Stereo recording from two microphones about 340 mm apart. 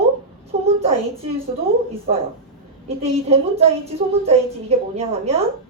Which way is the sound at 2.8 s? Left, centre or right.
Centre.